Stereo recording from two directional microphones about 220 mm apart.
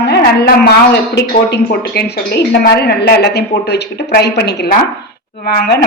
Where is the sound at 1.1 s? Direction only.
50° left (ahead or behind).